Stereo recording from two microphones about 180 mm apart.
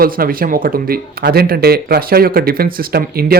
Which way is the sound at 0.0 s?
55° right (ahead or behind).